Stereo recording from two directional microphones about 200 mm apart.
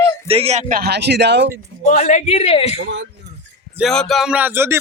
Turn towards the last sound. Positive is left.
turn(degrees=-10)  # may be behind; listen again after turning